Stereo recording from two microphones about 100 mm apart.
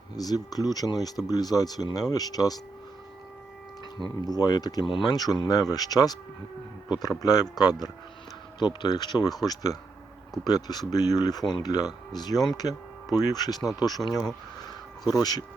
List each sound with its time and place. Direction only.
0.2 s speech: 40° left (ahead or behind)
4.3 s speech: 40° left (ahead or behind)
4.9 s speech: 60° left (ahead or behind)
5.1 s speech: 40° left (ahead or behind)
7.2 s speech: 40° left (ahead or behind)